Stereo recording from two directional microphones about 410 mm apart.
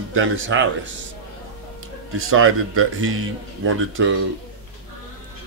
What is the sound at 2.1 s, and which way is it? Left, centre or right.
Speech, right.